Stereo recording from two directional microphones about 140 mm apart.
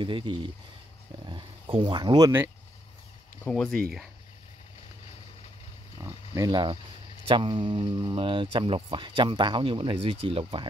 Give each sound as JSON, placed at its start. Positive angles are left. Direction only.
{"t": 0.0, "sound": "speech", "side_deg": -35}
{"t": 3.4, "sound": "speech", "side_deg": 10}
{"t": 6.0, "sound": "speech", "side_deg": -25}